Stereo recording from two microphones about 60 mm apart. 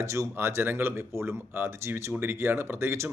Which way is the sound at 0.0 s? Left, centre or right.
Right.